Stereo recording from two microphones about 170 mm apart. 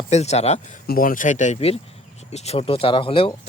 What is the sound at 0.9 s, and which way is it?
Speech, 55° left (ahead or behind).